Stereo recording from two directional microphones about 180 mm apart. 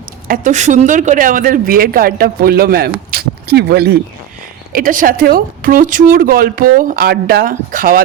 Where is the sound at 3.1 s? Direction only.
60° right (ahead or behind).